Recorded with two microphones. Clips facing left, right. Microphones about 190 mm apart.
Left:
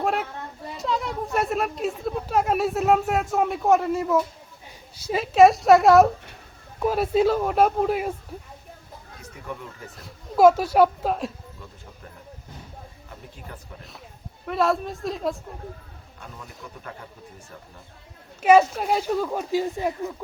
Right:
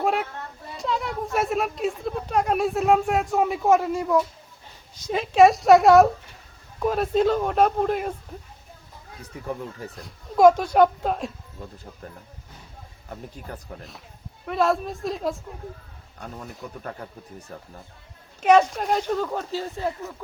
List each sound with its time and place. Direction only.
0.0 s children playing: centre (ahead or behind)
0.8 s speech: centre (ahead or behind)
9.9 s speech: 5° left (ahead or behind)
14.4 s speech: centre (ahead or behind)
17.0 s speech: 45° right (ahead or behind)
18.4 s speech: 5° left (ahead or behind)